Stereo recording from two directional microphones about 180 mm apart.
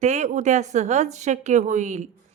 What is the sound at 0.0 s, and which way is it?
Speech, 40° right (ahead or behind).